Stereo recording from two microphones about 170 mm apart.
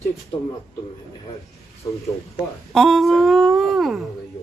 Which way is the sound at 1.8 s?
25° left (ahead or behind).